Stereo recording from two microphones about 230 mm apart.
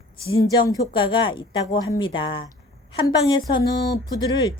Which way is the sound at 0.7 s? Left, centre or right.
Left.